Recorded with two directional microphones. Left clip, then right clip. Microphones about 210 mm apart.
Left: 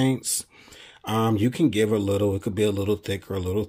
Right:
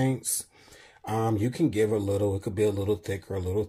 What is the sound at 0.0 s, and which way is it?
Speech, 25° left (ahead or behind).